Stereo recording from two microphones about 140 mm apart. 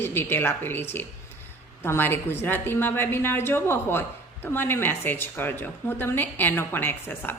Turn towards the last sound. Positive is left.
turn(degrees=15)  # may be behind; listen again after turning